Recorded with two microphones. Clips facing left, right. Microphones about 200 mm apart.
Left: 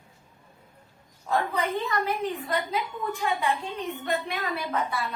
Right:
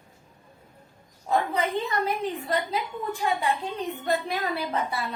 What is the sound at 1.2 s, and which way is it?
Speech, 20° right (ahead or behind).